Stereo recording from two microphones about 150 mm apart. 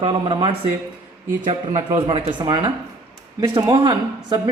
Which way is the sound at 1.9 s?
30° right (ahead or behind).